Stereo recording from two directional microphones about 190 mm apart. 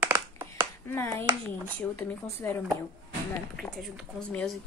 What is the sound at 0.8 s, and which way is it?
Speech, 10° left (ahead or behind).